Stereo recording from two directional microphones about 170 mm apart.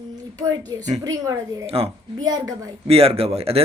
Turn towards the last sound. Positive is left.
turn(degrees=-35)  # may be behind; listen again after turning